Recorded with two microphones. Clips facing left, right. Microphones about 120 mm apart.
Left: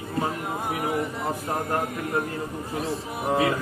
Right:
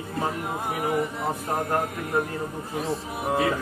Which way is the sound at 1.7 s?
Centre (ahead or behind).